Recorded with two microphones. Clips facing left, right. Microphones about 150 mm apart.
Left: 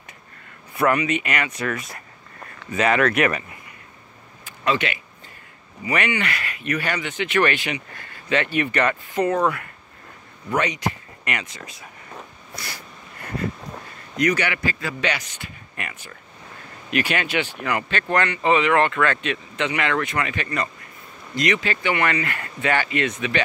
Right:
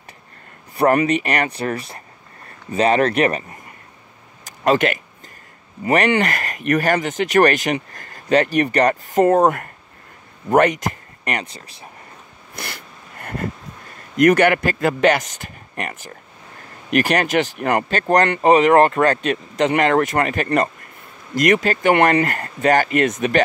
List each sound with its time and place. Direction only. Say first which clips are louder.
0.9 s speech: right 5 dB; 35° right (ahead or behind)
12.5 s a sound: right 3 dB; 55° right (ahead or behind)
14.1 s speech: right 9 dB; 50° right (ahead or behind)